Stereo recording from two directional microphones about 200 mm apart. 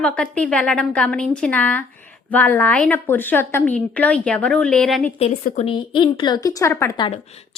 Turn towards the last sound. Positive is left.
turn(degrees=15)  # may be behind; listen again after turning